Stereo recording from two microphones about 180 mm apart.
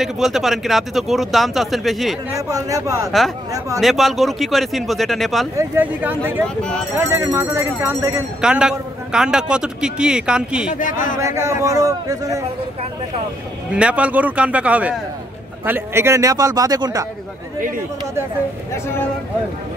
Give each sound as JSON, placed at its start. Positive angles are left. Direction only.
{"t": 0.0, "sound": "a man's voice", "side_deg": 0}
{"t": 2.3, "sound": "a man's voice", "side_deg": -20}
{"t": 3.8, "sound": "a man's voice", "side_deg": 0}
{"t": 5.6, "sound": "speech", "side_deg": -10}
{"t": 6.4, "sound": "a man's voice", "side_deg": 5}
{"t": 7.0, "sound": "speech", "side_deg": -15}
{"t": 8.4, "sound": "a man's voice", "side_deg": -5}
{"t": 10.8, "sound": "speech", "side_deg": 45}
{"t": 11.1, "sound": "speech", "side_deg": -15}
{"t": 13.7, "sound": "a man's voice", "side_deg": -5}